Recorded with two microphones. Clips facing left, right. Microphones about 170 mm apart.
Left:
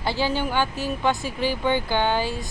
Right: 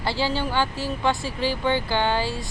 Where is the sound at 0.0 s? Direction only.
15° left (ahead or behind).